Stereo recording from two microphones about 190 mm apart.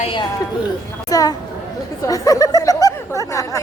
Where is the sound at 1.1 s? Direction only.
20° left (ahead or behind).